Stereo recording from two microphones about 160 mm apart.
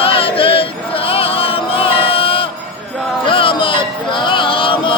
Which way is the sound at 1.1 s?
35° left (ahead or behind).